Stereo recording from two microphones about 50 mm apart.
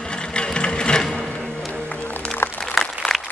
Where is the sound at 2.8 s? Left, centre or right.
Centre.